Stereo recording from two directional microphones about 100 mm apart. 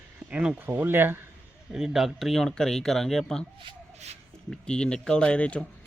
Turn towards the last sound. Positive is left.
turn(degrees=10)  # may be behind; listen again after turning